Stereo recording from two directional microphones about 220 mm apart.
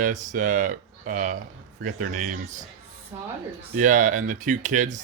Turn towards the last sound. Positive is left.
turn(degrees=-35)  # may be behind; listen again after turning